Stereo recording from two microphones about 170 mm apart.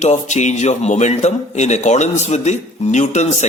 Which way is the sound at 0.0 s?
45° left (ahead or behind).